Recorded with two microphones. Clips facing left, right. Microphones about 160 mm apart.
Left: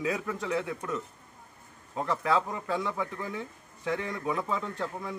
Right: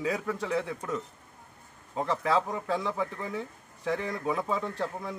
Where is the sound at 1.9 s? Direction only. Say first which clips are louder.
Right 1 dB; 10° right (ahead or behind).